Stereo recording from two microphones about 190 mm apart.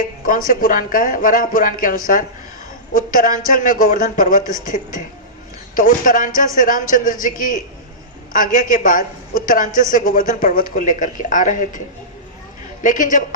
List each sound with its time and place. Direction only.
0.2 s a woman's voice: 45° left (ahead or behind)
12.8 s a woman's voice: 45° left (ahead or behind)